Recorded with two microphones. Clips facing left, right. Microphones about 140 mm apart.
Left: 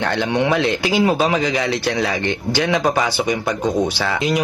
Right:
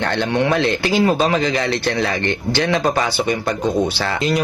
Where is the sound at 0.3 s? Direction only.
15° left (ahead or behind).